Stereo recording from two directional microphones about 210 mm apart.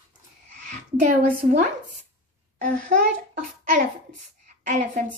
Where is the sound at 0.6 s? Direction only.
35° right (ahead or behind).